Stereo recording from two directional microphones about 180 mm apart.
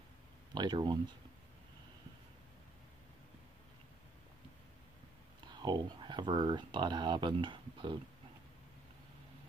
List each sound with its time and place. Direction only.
0.6 s speech: 25° right (ahead or behind)
5.5 s speech: 25° right (ahead or behind)